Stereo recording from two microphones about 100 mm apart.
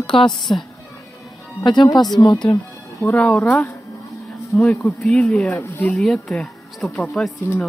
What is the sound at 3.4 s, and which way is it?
Speech, 25° left (ahead or behind).